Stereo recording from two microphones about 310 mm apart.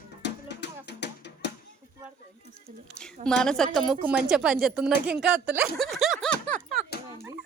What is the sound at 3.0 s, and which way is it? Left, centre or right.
Speech, centre.